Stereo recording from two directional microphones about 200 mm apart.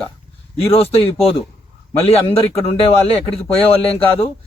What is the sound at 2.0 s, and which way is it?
A man's voice, 30° left (ahead or behind).